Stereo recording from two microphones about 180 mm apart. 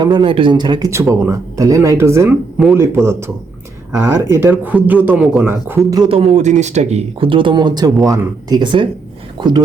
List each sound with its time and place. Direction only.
0.0 s a man's voice: 25° right (ahead or behind)